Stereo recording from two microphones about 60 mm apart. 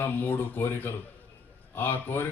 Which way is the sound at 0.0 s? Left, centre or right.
Left.